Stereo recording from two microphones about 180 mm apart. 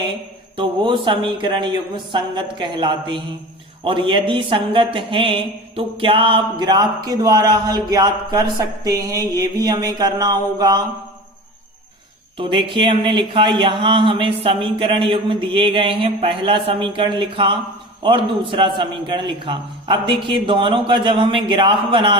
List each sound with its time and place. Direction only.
0.5 s mantra: 30° right (ahead or behind)
12.4 s mantra: 25° right (ahead or behind)